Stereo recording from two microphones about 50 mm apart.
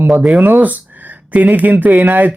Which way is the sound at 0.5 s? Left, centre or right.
Right.